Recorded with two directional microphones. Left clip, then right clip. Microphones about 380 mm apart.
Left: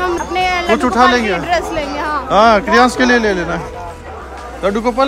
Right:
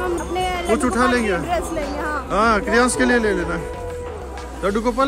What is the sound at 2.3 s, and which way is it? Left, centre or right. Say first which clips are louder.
A man's voice: left 8 dB; centre.